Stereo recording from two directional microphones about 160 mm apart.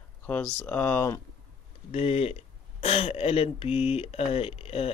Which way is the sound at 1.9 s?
40° left (ahead or behind).